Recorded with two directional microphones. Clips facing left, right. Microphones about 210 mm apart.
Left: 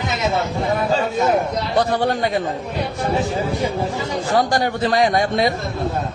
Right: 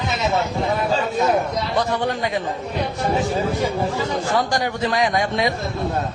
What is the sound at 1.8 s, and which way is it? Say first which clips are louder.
Speech: left 4 dB; 35° left (ahead or behind).